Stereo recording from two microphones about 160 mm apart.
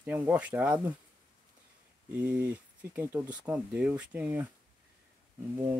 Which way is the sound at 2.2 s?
10° right (ahead or behind).